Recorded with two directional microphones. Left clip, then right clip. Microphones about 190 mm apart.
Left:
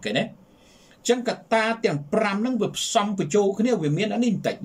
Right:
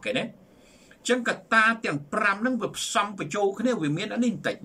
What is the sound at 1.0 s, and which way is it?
Speech, 15° left (ahead or behind).